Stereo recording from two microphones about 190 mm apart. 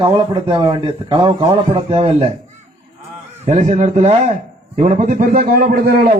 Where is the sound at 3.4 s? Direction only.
35° right (ahead or behind).